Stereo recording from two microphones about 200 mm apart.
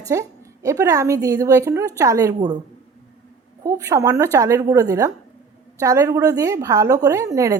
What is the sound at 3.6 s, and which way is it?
A woman's voice, 15° right (ahead or behind).